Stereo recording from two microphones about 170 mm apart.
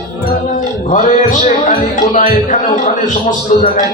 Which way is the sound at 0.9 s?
50° left (ahead or behind).